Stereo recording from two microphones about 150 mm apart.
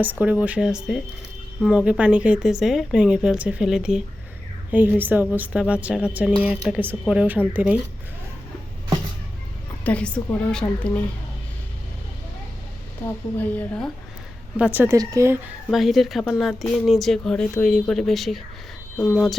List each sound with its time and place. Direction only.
0.0 s speech: 10° right (ahead or behind)
9.8 s a woman's voice: 10° left (ahead or behind)
13.3 s a woman's voice: 10° left (ahead or behind)
14.5 s speech: 10° right (ahead or behind)
15.7 s speech: centre (ahead or behind)